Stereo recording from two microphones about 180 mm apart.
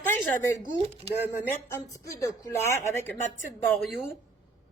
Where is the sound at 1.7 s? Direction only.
15° left (ahead or behind).